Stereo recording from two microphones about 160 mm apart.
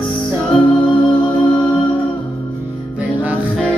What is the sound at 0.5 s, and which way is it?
Music, centre (ahead or behind).